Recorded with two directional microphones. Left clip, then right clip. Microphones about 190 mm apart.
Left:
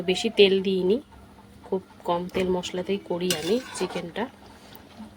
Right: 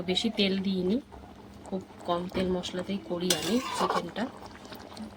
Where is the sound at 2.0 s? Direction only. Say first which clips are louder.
Left 4 dB; 15° left (ahead or behind).